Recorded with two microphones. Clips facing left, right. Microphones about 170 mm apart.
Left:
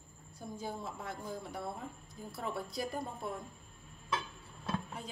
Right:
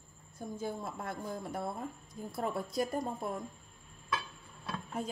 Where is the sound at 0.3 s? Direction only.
50° right (ahead or behind).